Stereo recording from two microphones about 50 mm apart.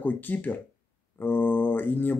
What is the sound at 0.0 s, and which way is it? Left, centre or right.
Speech, left.